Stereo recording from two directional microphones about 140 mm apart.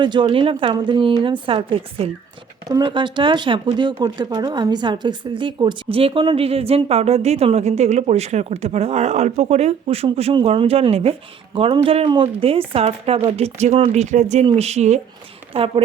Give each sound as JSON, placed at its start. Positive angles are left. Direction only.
{"t": 0.0, "sound": "a woman's voice", "side_deg": -35}
{"t": 15.5, "sound": "speech", "side_deg": -40}